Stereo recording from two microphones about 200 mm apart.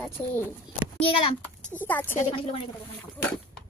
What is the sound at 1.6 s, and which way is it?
Speech, 10° left (ahead or behind).